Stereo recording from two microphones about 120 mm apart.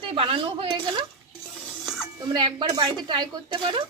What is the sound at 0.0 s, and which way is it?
Speech, 45° right (ahead or behind).